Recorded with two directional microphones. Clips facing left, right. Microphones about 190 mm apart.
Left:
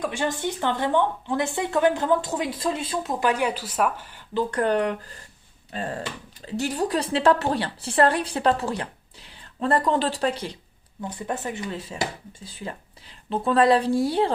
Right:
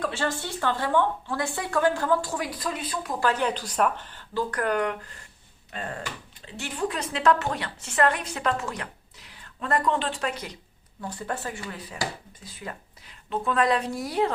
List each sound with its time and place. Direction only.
0.0 s a woman's voice: 15° left (ahead or behind)
4.4 s a woman's voice: 25° left (ahead or behind)
11.0 s a woman's voice: 20° left (ahead or behind)